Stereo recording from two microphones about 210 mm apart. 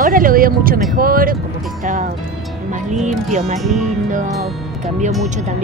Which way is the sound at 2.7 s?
35° right (ahead or behind).